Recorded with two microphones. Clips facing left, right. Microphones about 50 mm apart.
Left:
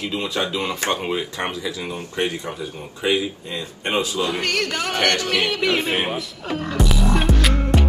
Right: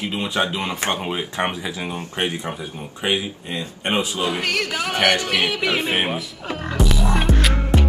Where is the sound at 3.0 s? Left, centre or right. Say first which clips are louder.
Left 2 dB; right.